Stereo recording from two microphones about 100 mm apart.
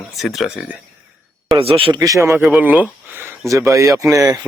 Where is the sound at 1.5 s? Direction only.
65° right (ahead or behind).